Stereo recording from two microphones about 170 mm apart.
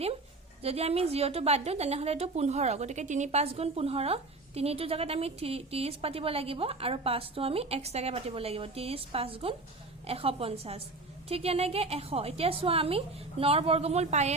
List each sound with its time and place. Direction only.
0.6 s a woman's voice: 35° right (ahead or behind)